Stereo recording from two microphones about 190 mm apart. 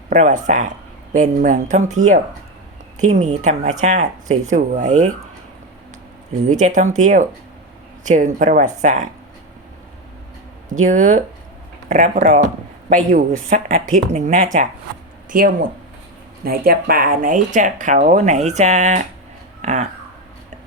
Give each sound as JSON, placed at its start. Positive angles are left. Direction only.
{"t": 0.1, "sound": "speech", "side_deg": -40}
{"t": 6.5, "sound": "speech", "side_deg": -40}
{"t": 10.8, "sound": "speech", "side_deg": -40}